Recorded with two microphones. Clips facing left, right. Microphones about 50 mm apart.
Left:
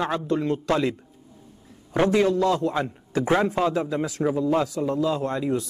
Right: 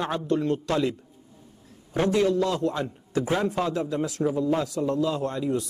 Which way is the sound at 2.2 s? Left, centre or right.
Left.